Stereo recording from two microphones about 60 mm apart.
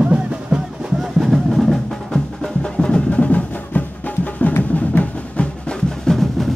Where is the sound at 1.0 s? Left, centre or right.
Centre; by 5.5 s left.